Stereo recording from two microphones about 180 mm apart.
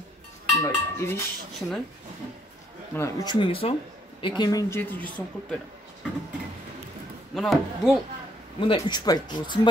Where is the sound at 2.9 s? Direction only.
20° left (ahead or behind).